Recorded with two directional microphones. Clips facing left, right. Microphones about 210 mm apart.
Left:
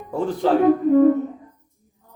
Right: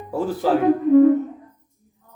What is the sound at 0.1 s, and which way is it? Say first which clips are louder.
Speech: even; 5° right (ahead or behind).